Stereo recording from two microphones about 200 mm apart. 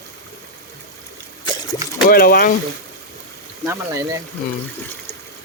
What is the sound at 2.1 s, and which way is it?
Speech, 50° left (ahead or behind).